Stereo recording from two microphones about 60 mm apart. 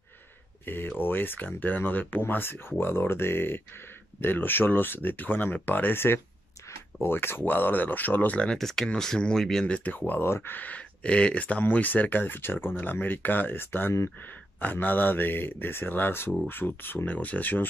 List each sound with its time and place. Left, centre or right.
0.7 s speech: left
8.5 s speech: centre
9.7 s speech: left